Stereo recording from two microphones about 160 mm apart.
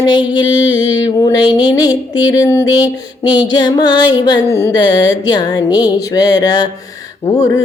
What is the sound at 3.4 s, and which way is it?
Mantra, 25° left (ahead or behind).